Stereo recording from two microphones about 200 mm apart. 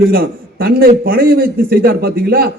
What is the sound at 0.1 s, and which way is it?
A man's voice, 50° right (ahead or behind).